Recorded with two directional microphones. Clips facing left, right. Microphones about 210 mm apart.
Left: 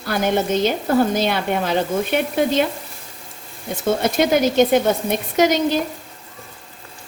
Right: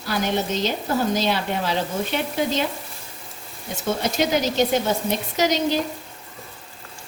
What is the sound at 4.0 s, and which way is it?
A woman's voice, 55° left (ahead or behind).